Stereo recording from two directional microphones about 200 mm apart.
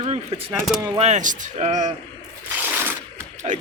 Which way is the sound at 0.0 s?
30° right (ahead or behind).